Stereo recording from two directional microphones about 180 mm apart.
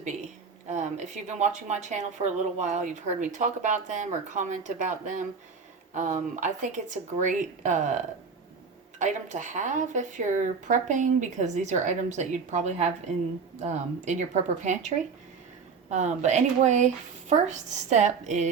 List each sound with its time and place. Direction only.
0.7 s speech: 40° right (ahead or behind)
9.0 s speech: 45° right (ahead or behind)